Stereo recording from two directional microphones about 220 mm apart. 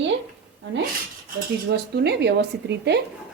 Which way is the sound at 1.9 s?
50° right (ahead or behind).